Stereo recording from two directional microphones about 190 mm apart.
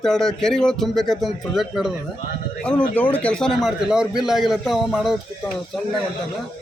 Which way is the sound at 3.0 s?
10° left (ahead or behind).